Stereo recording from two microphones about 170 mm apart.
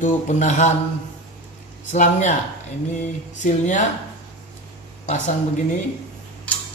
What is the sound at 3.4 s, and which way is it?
Speech, 45° left (ahead or behind).